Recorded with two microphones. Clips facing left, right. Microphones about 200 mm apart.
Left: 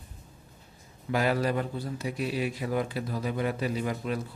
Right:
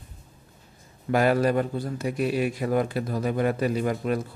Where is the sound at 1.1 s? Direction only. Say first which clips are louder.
Right 5 dB; 50° right (ahead or behind).